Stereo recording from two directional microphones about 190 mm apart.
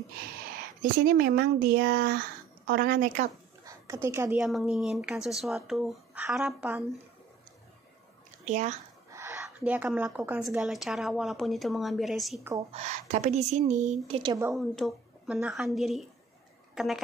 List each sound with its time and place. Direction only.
1.0 s speech: 50° right (ahead or behind)
3.6 s a woman's voice: 15° right (ahead or behind)
4.4 s speech: centre (ahead or behind)
8.5 s speech: 35° right (ahead or behind)
9.1 s a sound: 15° right (ahead or behind)
9.6 s speech: 5° right (ahead or behind)
12.7 s speech: 35° right (ahead or behind)
14.5 s a woman's voice: centre (ahead or behind)